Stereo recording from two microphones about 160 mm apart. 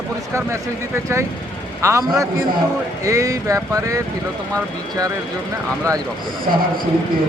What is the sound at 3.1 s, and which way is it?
Speech, 20° right (ahead or behind).